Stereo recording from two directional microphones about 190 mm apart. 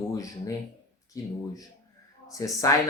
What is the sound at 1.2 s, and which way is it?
Speech, 15° left (ahead or behind).